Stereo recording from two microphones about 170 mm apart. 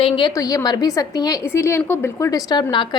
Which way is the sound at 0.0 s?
30° left (ahead or behind).